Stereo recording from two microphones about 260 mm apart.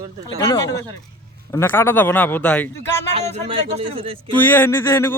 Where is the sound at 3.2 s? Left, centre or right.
Right.